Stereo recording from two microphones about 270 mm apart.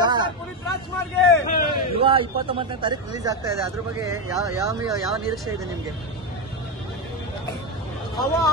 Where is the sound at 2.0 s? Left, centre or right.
Centre.